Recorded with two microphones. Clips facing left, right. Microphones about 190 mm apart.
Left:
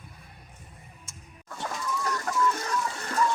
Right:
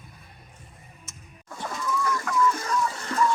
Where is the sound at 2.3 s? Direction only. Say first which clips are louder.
Right 2 dB; 40° left (ahead or behind).